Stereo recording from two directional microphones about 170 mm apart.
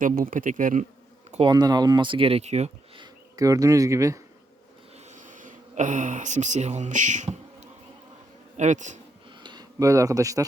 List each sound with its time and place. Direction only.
0.0 s speech: 55° right (ahead or behind)
1.5 s speech: 25° right (ahead or behind); by 3.0 s 40° right (ahead or behind)
3.0 s speech: 20° right (ahead or behind)
4.9 s a sound: 45° right (ahead or behind)
8.5 s speech: 45° right (ahead or behind)
9.4 s speech: 25° right (ahead or behind)